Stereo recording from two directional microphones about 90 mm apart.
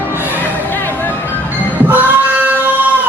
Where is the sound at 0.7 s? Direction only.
20° left (ahead or behind).